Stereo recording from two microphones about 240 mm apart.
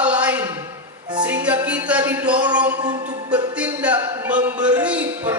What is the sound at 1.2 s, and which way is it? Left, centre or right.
Music, centre.